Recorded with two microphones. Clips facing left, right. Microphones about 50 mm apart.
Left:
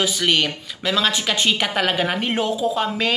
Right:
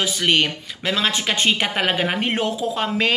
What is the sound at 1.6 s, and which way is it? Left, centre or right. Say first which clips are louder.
Speech: even; right.